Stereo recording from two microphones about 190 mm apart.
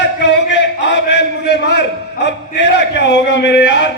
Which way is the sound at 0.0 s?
65° left (ahead or behind).